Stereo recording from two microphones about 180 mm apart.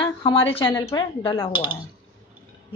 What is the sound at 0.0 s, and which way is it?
A woman's voice, 30° left (ahead or behind).